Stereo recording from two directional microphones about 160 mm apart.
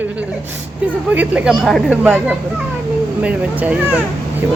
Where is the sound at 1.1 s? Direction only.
10° right (ahead or behind).